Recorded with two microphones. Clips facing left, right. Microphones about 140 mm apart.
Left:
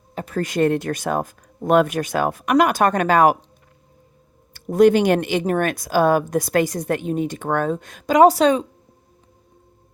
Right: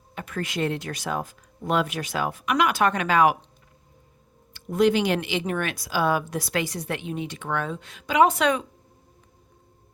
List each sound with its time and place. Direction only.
0.1 s speech: 35° left (ahead or behind)
4.5 s speech: 45° left (ahead or behind)